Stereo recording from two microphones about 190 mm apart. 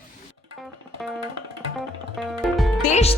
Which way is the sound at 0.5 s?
Centre (ahead or behind).